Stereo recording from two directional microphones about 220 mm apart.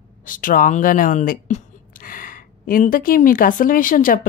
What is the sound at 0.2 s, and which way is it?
Speech, 40° left (ahead or behind).